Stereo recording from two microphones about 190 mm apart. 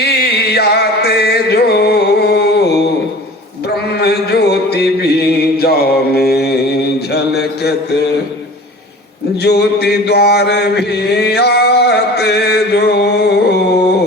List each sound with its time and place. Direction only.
0.0 s chant: 60° left (ahead or behind)
3.9 s music: 60° left (ahead or behind)
9.4 s mantra: 60° left (ahead or behind)